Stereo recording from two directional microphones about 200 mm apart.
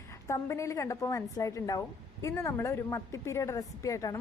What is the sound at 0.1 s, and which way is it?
Speech, 15° left (ahead or behind).